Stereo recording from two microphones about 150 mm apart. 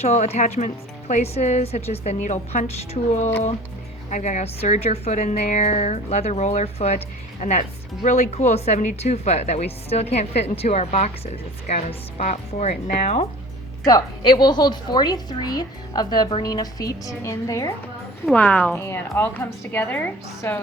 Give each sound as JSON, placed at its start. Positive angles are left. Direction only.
{"t": 0.0, "sound": "speech", "side_deg": 50}
{"t": 13.8, "sound": "a woman's voice", "side_deg": 30}
{"t": 18.3, "sound": "a woman's voice", "side_deg": 10}